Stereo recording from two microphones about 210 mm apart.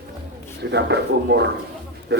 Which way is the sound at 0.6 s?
55° right (ahead or behind).